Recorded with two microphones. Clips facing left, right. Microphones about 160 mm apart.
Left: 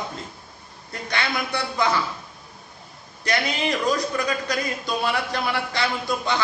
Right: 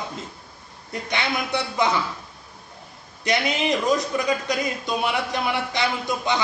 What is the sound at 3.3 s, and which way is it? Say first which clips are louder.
A man's voice: right 2 dB; 20° right (ahead or behind).